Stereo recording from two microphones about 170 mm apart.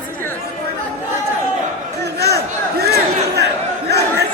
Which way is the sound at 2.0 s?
70° right (ahead or behind).